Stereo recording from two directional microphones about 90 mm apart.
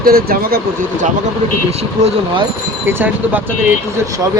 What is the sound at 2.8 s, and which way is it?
Speech, 20° right (ahead or behind).